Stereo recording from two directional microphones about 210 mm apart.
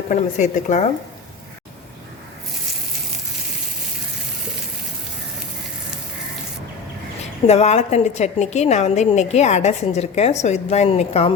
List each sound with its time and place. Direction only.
0.1 s a woman's voice: 35° left (ahead or behind)
7.4 s a woman's voice: 30° left (ahead or behind)